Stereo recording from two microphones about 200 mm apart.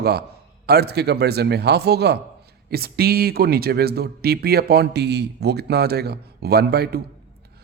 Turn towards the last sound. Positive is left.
turn(degrees=-55)  # may be behind; listen again after turning